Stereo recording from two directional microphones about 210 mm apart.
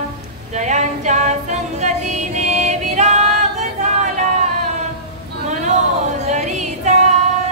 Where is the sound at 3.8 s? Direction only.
35° right (ahead or behind).